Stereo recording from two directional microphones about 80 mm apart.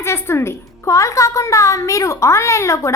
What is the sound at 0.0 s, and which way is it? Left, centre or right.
A woman's voice, left.